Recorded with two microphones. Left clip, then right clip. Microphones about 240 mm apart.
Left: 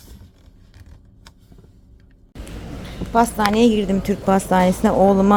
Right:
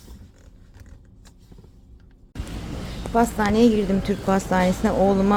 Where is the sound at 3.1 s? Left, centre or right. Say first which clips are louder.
Left 4 dB; centre.